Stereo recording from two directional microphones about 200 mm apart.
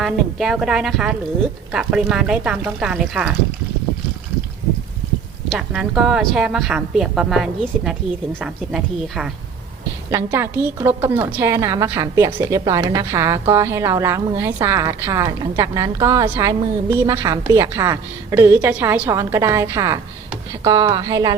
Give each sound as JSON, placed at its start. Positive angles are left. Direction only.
{"t": 0.0, "sound": "a woman's voice", "side_deg": 0}
{"t": 5.5, "sound": "a woman's voice", "side_deg": -5}
{"t": 10.1, "sound": "a woman's voice", "side_deg": -15}